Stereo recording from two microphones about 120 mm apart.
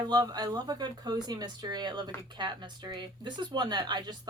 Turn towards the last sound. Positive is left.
turn(degrees=-35)  # may be behind; listen again after turning